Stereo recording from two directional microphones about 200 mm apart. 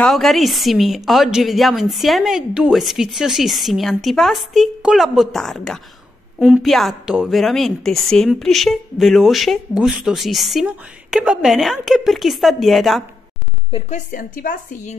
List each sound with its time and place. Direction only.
0.0 s a woman's voice: centre (ahead or behind)
13.7 s a woman's voice: 35° left (ahead or behind)